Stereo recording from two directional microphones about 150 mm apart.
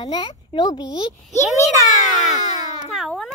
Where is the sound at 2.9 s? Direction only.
Centre (ahead or behind).